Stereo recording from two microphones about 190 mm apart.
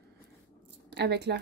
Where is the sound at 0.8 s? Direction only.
65° right (ahead or behind).